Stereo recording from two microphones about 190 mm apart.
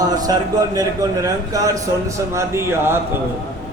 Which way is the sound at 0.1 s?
20° right (ahead or behind).